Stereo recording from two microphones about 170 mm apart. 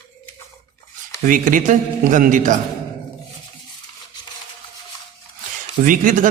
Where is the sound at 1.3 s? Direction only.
50° right (ahead or behind).